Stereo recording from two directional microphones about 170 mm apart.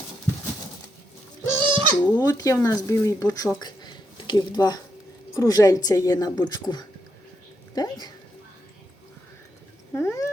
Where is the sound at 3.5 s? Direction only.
25° left (ahead or behind).